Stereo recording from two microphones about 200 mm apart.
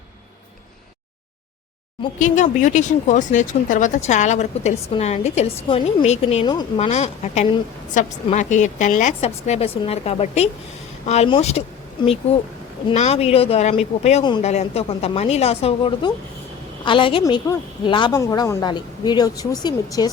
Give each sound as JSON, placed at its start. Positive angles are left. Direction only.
{"t": 2.1, "sound": "speech", "side_deg": 40}
{"t": 6.8, "sound": "a woman's voice", "side_deg": 35}